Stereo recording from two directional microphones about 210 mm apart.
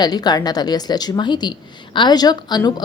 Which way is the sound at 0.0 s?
20° left (ahead or behind).